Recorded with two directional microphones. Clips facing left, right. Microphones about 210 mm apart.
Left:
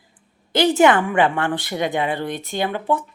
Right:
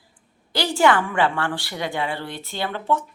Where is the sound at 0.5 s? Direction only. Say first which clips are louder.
Left 4 dB; 20° left (ahead or behind).